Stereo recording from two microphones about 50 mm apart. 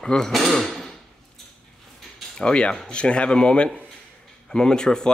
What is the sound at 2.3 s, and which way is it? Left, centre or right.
Speech, centre.